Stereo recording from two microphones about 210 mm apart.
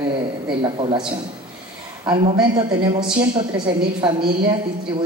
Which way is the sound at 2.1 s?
20° right (ahead or behind).